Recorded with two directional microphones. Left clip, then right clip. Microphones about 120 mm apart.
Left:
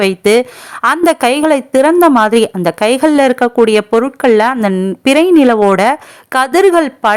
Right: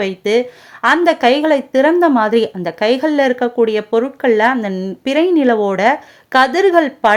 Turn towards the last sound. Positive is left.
turn(degrees=35)  # may be behind; listen again after turning